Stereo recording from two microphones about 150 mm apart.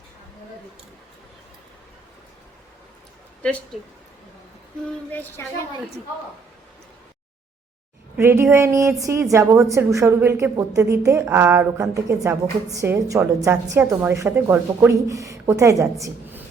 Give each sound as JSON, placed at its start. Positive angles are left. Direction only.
{"t": 3.4, "sound": "speech", "side_deg": 5}
{"t": 5.4, "sound": "speech", "side_deg": 15}
{"t": 8.1, "sound": "a woman's voice", "side_deg": -15}